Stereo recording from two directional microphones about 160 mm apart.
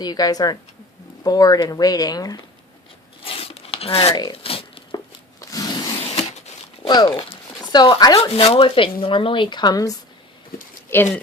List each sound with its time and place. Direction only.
0.0 s speech: 25° left (ahead or behind)
3.2 s crumpling: 35° left (ahead or behind)
5.4 s a sound: 20° left (ahead or behind)
6.8 s speech: 25° left (ahead or behind)
8.3 s speech: 40° left (ahead or behind)
10.9 s speech: 15° left (ahead or behind)